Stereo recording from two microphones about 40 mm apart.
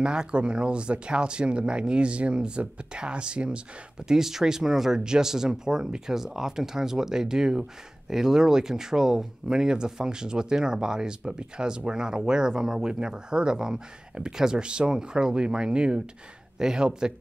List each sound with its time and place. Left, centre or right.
0.0 s speech: right
4.1 s speech: centre